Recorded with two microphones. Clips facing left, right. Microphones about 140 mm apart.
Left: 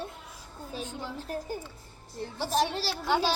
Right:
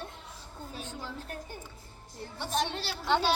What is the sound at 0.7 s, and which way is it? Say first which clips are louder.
Speech: left 5 dB; 20° left (ahead or behind).